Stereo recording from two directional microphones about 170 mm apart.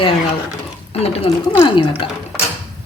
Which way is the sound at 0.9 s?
35° left (ahead or behind).